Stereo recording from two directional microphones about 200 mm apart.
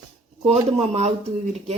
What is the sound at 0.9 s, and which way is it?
Speech, 30° right (ahead or behind).